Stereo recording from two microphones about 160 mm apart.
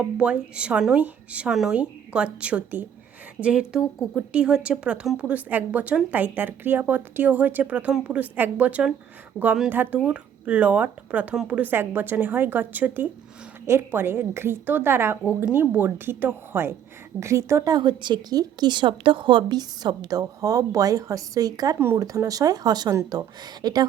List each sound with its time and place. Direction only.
0.0 s a woman's voice: 5° right (ahead or behind); by 23.8 s 25° right (ahead or behind)